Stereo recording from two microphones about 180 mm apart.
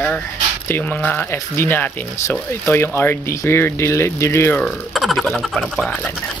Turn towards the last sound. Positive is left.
turn(degrees=5)  # may be behind; listen again after turning